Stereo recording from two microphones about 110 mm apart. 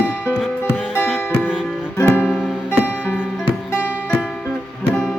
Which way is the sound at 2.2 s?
5° right (ahead or behind).